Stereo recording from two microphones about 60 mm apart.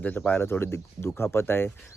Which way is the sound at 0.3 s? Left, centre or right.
Left.